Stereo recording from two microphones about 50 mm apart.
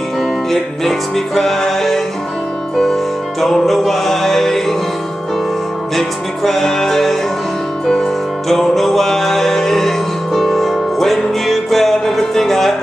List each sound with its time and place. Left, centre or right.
0.5 s music: centre
5.9 s music: centre
8.5 s music: centre